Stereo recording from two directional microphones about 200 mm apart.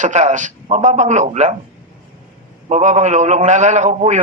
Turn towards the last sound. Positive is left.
turn(degrees=-35)  # may be behind; listen again after turning